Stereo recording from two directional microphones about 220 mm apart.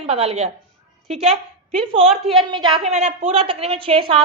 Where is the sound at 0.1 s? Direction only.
30° right (ahead or behind).